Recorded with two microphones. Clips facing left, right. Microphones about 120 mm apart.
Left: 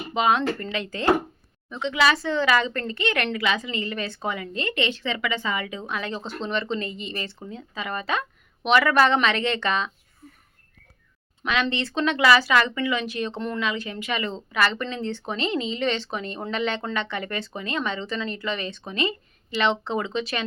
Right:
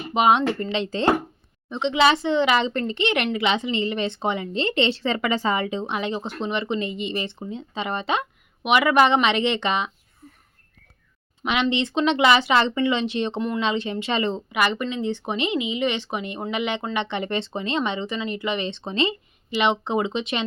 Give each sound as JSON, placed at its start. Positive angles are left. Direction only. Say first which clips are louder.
{"t": 0.1, "sound": "a woman's voice", "louder": "right 3 dB", "side_deg": -20}
{"t": 11.4, "sound": "a woman's voice", "louder": "right 3 dB", "side_deg": -20}